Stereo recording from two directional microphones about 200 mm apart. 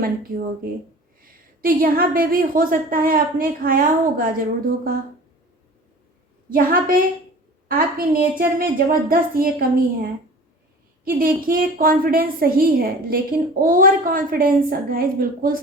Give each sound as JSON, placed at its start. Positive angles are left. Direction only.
{"t": 0.0, "sound": "a woman's voice", "side_deg": -45}
{"t": 6.5, "sound": "a woman's voice", "side_deg": -45}